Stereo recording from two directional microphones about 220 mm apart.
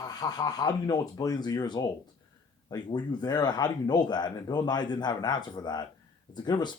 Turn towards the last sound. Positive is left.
turn(degrees=20)  # may be behind; listen again after turning